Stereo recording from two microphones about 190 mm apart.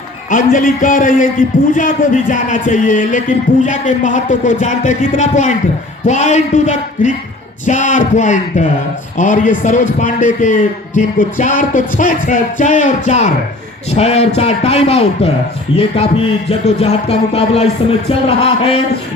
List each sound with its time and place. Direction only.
0.3 s a man's voice: 45° left (ahead or behind)
16.5 s a man's voice: 35° left (ahead or behind)